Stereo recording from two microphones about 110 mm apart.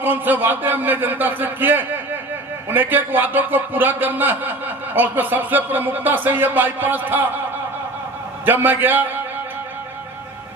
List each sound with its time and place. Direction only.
0.0 s a man's voice: 15° right (ahead or behind)
8.4 s a man's voice: 20° right (ahead or behind)